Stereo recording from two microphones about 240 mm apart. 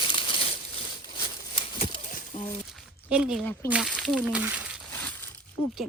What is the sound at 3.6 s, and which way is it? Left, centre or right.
Speech, centre.